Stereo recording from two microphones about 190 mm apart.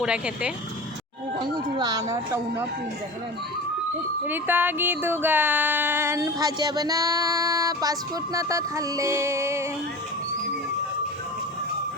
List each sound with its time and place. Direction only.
0.0 s speech: 5° right (ahead or behind)
1.4 s speech: 20° right (ahead or behind)
4.3 s a sound: 10° right (ahead or behind)